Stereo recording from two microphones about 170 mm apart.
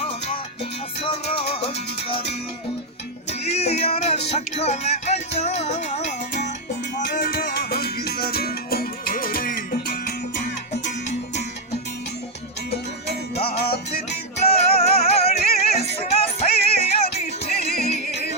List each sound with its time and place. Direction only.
1.0 s music: 35° left (ahead or behind)
7.0 s music: 55° left (ahead or behind)
13.3 s music: 35° left (ahead or behind)